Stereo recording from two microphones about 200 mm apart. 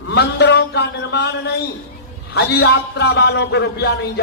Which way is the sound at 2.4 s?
60° left (ahead or behind).